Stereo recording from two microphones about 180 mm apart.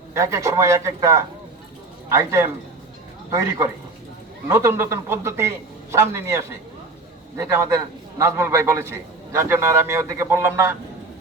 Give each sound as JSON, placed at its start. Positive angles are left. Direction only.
{"t": 0.1, "sound": "a man's voice", "side_deg": -15}